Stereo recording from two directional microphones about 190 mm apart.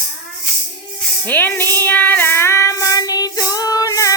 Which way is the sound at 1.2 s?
10° left (ahead or behind).